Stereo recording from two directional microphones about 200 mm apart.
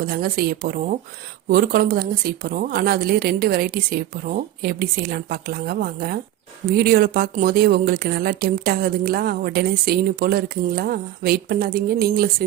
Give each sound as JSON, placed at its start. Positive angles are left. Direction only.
{"t": 0.1, "sound": "speech", "side_deg": -50}